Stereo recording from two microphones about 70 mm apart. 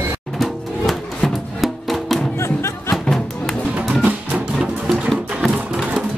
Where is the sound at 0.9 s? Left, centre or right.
Centre.